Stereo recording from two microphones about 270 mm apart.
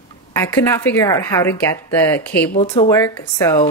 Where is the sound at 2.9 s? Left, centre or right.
Centre.